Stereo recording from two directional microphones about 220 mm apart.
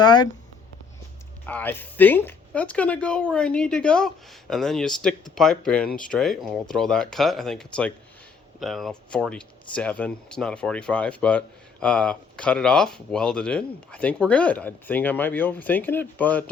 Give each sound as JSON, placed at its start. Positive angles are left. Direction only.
{"t": 0.0, "sound": "speech", "side_deg": 20}
{"t": 1.5, "sound": "speech", "side_deg": 10}